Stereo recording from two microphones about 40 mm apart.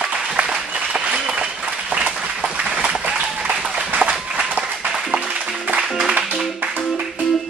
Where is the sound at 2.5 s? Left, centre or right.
Right.